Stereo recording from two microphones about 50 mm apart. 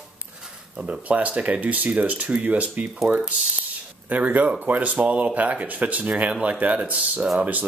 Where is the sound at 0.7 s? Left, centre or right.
Centre.